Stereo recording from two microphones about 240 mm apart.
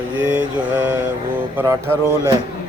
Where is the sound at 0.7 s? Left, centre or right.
Centre.